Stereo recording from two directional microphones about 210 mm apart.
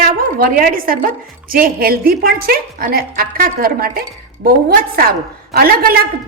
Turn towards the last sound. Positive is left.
turn(degrees=-45)  # may be behind; listen again after turning